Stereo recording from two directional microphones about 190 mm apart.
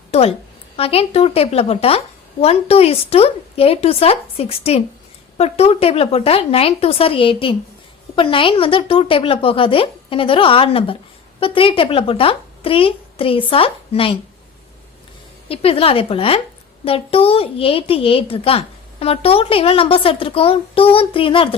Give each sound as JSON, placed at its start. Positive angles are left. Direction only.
{"t": 0.1, "sound": "a woman's voice", "side_deg": 30}
{"t": 15.4, "sound": "a woman's voice", "side_deg": 30}